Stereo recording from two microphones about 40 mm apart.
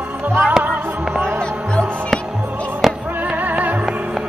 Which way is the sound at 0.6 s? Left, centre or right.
Right.